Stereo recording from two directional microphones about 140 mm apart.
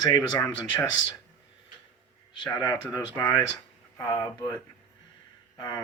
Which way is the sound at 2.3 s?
35° left (ahead or behind).